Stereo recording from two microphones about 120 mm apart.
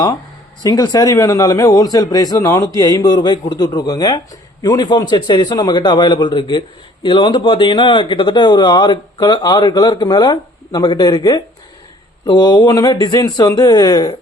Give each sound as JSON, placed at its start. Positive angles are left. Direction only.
{"t": 0.6, "sound": "speech", "side_deg": 30}